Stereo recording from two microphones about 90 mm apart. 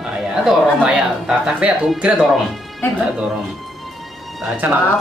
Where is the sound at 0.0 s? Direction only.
5° right (ahead or behind).